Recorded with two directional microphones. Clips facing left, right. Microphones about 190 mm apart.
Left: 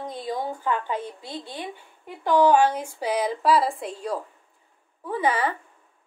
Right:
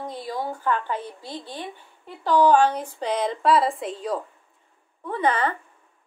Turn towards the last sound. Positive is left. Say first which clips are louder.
# right 1 dB
turn(degrees=10)  # may be behind; listen again after turning